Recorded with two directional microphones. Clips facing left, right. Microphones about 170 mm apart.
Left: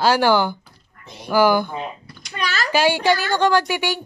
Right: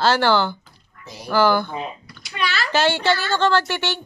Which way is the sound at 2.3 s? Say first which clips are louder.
Even; 40° left (ahead or behind).